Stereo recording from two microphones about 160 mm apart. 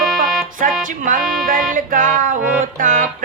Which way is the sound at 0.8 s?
60° right (ahead or behind).